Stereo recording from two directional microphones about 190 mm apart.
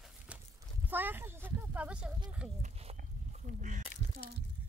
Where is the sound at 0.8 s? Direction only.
10° right (ahead or behind).